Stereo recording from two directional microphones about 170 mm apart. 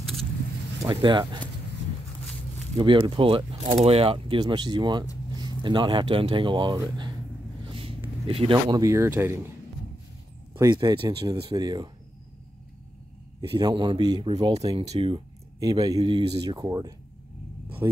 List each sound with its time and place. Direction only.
0.8 s speech: 25° right (ahead or behind)
2.8 s speech: 30° right (ahead or behind)
7.6 s vehicle: 30° right (ahead or behind)
8.3 s speech: 30° right (ahead or behind); by 9.4 s 15° right (ahead or behind)
10.5 s speech: 25° right (ahead or behind)
13.4 s speech: 30° right (ahead or behind)
15.6 s speech: 20° right (ahead or behind)